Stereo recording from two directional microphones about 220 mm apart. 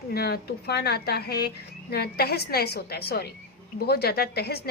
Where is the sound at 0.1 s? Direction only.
45° left (ahead or behind).